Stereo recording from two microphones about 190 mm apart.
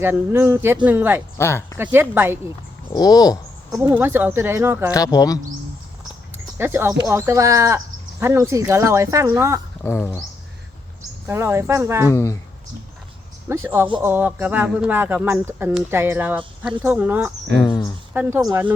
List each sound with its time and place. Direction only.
0.0 s a man's voice: 10° right (ahead or behind)
1.4 s speech: 15° left (ahead or behind)
1.8 s a man's voice: 10° right (ahead or behind)
2.9 s speech: 20° left (ahead or behind)
3.8 s a man's voice: 10° right (ahead or behind)
4.9 s speech: 20° left (ahead or behind)
6.6 s a man's voice: 10° right (ahead or behind)
9.8 s speech: 10° left (ahead or behind)
11.3 s a man's voice: 15° right (ahead or behind)
12.1 s speech: 15° left (ahead or behind)
13.7 s a man's voice: 10° right (ahead or behind)
17.6 s a sound: 20° left (ahead or behind)
18.1 s a man's voice: 10° right (ahead or behind)